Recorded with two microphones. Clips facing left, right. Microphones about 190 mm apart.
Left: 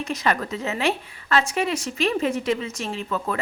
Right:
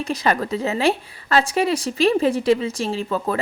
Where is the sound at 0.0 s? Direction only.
35° right (ahead or behind).